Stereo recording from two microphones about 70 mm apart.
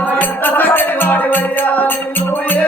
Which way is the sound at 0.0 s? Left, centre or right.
Left.